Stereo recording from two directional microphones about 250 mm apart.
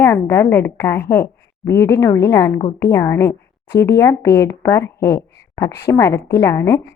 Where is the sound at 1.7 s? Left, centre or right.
Left.